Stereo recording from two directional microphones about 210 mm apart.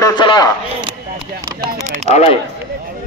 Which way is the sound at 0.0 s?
20° left (ahead or behind).